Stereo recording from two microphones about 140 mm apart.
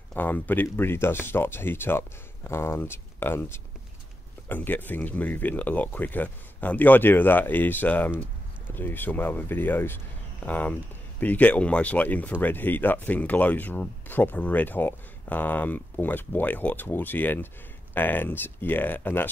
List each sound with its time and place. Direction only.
0.1 s speech: 15° left (ahead or behind)